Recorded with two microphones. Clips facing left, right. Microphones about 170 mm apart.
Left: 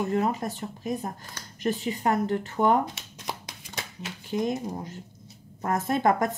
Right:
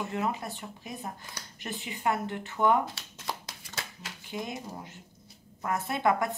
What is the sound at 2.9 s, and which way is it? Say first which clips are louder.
Shuffling cards: left 1 dB; 15° left (ahead or behind).